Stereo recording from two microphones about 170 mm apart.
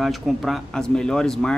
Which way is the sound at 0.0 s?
Centre (ahead or behind).